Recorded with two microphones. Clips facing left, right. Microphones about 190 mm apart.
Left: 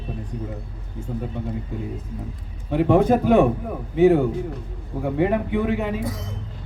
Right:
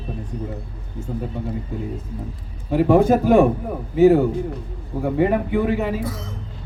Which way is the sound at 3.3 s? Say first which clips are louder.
Right 2 dB; 45° right (ahead or behind).